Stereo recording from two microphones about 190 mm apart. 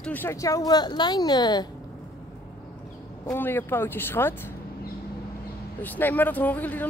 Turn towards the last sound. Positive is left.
turn(degrees=10)  # may be behind; listen again after turning